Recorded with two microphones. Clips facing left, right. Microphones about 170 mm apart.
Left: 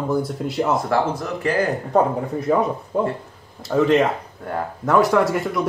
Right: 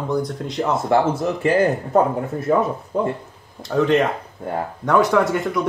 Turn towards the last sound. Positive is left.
turn(degrees=0)  # may be behind; listen again after turning